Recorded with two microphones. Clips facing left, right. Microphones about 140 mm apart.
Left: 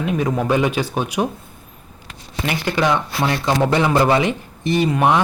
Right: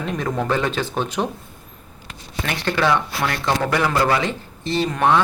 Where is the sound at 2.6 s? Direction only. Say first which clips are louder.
Even; 15° left (ahead or behind).